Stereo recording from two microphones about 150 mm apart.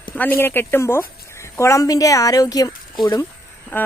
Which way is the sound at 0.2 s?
15° left (ahead or behind).